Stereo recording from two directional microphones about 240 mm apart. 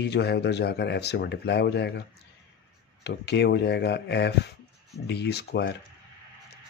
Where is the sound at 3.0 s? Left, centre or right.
Left.